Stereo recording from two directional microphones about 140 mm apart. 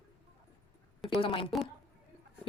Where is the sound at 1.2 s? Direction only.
40° left (ahead or behind).